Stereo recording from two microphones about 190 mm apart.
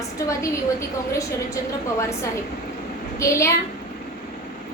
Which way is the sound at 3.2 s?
15° left (ahead or behind).